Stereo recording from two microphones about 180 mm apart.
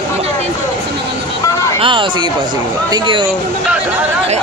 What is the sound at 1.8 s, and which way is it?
Speech, 25° right (ahead or behind).